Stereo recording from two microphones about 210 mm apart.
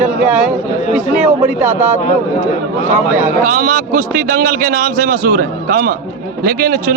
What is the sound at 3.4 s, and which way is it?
A man's voice, 40° right (ahead or behind).